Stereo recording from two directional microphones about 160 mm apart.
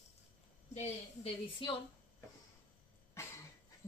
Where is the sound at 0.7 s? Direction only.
40° left (ahead or behind).